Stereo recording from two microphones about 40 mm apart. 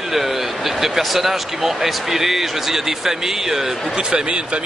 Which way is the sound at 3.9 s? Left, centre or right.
Right.